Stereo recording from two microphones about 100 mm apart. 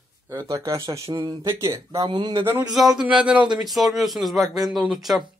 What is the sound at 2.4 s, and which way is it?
Speech, 25° right (ahead or behind).